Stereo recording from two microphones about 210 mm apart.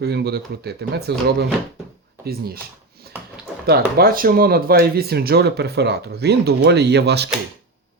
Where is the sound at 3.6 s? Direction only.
45° right (ahead or behind).